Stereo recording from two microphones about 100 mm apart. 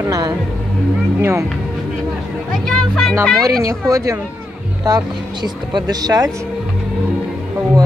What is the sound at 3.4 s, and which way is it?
Speech, 35° right (ahead or behind).